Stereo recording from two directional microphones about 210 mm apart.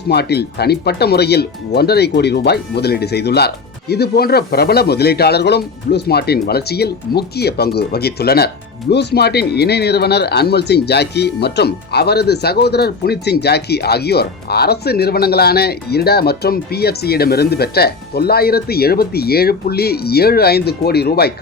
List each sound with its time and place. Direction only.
0.1 s speech: 50° left (ahead or behind)